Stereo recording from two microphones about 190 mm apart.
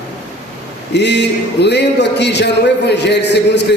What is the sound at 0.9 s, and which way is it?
A man's voice, 65° left (ahead or behind).